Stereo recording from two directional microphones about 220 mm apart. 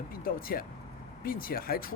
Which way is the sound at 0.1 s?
40° left (ahead or behind).